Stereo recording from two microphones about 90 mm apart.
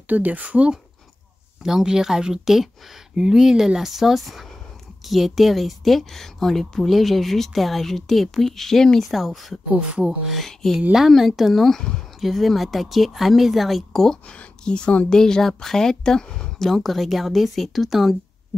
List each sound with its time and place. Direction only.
0.1 s speech: 15° right (ahead or behind); by 9.6 s centre (ahead or behind)
9.7 s speech: 10° right (ahead or behind)